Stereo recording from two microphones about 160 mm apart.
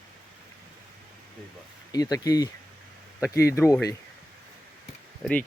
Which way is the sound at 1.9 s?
25° left (ahead or behind).